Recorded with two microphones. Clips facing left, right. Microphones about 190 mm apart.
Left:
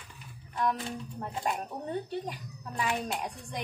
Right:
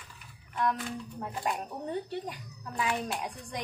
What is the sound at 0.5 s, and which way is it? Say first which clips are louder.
Speech: even; centre (ahead or behind).